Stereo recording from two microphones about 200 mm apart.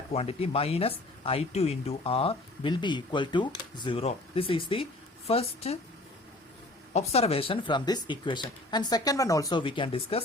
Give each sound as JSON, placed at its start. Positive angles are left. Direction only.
{"t": 0.1, "sound": "a woman's voice", "side_deg": 30}
{"t": 6.9, "sound": "speech", "side_deg": 30}